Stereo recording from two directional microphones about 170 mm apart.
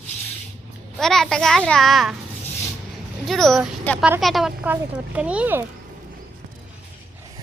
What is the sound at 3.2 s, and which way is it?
Speech, centre (ahead or behind).